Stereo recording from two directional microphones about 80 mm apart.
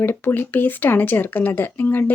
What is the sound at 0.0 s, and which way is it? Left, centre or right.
Speech, left.